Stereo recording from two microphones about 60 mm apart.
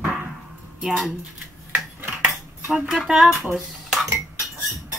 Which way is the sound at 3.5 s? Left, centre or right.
Centre.